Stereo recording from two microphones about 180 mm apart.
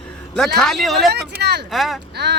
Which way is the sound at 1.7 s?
Centre (ahead or behind).